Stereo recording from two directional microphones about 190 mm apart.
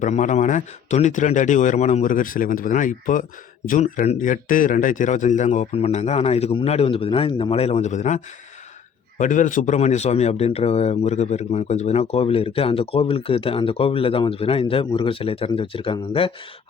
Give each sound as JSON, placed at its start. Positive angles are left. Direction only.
{"t": 0.0, "sound": "speech", "side_deg": 40}